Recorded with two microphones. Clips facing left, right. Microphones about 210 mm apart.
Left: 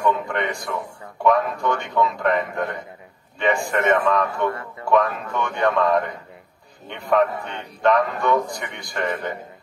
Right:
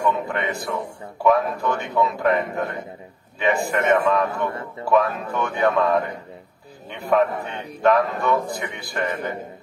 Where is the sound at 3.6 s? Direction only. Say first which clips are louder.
Right 1 dB; 5° right (ahead or behind).